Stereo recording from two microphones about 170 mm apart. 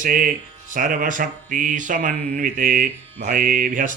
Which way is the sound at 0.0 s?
50° right (ahead or behind).